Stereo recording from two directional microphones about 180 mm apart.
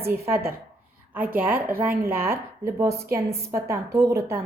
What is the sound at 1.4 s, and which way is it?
A woman's voice, 10° right (ahead or behind).